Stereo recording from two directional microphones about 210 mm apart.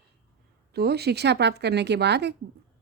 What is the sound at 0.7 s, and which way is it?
A woman's voice, 50° right (ahead or behind).